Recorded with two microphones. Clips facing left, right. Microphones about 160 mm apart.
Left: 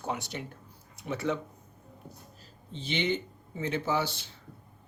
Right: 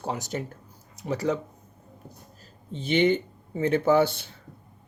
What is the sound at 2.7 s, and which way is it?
Speech, 50° right (ahead or behind).